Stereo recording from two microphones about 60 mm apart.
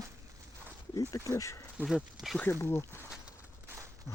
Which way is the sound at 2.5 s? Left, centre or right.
Left.